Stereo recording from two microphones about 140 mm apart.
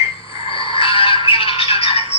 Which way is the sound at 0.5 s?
40° left (ahead or behind).